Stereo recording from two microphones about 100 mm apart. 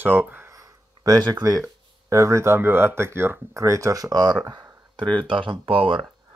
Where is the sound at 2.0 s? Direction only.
30° right (ahead or behind).